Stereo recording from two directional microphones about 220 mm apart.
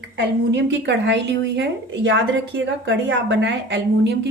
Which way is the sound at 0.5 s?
55° right (ahead or behind).